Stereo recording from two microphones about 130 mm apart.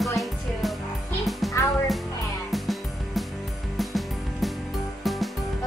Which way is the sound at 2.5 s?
Centre (ahead or behind).